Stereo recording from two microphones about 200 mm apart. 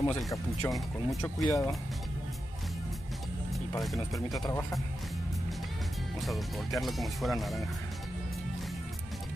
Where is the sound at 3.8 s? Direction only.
Centre (ahead or behind).